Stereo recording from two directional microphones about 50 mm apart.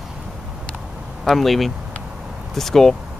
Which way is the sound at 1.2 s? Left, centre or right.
Centre.